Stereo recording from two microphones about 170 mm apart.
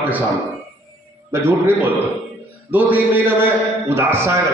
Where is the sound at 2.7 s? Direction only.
10° right (ahead or behind).